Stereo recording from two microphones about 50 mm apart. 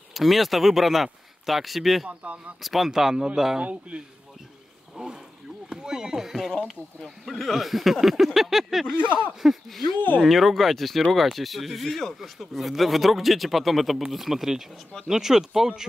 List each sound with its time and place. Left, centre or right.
0.1 s speech: centre
2.0 s speech: right
2.6 s speech: centre